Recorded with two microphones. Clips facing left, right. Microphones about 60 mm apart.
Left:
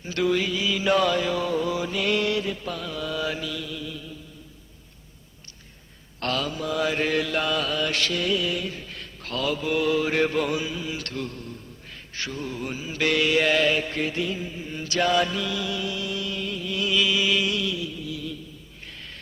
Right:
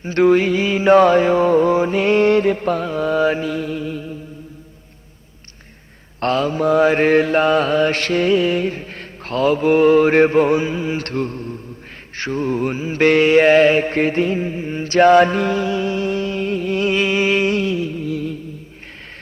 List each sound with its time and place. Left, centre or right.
0.0 s mantra: right
6.1 s mantra: right